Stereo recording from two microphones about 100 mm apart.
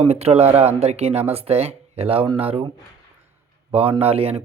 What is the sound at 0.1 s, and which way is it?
Speech, 90° right.